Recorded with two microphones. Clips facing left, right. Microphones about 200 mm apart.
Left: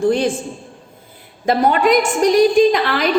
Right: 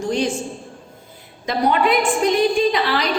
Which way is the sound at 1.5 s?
45° left (ahead or behind).